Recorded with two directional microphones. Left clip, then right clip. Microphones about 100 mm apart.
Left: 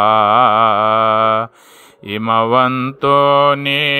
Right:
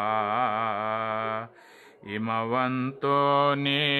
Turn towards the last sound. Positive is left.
turn(degrees=25)  # may be behind; listen again after turning